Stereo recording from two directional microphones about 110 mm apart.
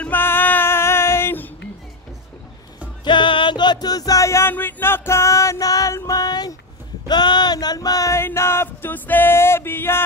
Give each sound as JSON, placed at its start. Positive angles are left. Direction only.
{"t": 0.0, "sound": "female singing", "side_deg": 20}
{"t": 3.0, "sound": "music", "side_deg": 45}
{"t": 7.1, "sound": "a sound", "side_deg": 40}